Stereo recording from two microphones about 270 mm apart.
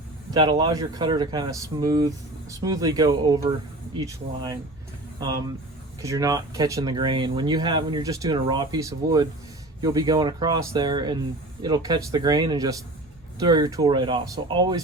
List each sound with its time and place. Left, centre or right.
0.3 s speech: centre
6.0 s speech: centre